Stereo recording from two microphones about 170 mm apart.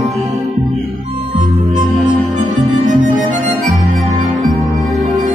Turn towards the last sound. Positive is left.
turn(degrees=-50)  # may be behind; listen again after turning